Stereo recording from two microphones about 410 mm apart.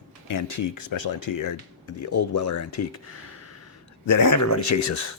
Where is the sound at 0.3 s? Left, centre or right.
Left.